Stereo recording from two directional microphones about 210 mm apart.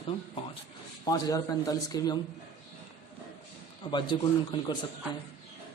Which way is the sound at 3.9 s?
20° left (ahead or behind).